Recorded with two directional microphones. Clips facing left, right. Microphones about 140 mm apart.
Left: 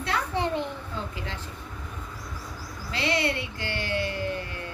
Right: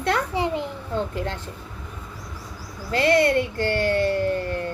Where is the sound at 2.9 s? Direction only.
50° right (ahead or behind).